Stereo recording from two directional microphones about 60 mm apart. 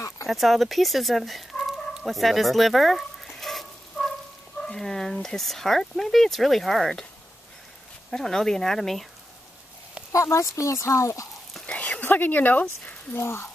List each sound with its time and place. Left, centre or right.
0.3 s speech: centre
2.0 s sizzle: centre
4.7 s speech: centre
8.1 s speech: centre
10.1 s speech: left
11.6 s speech: left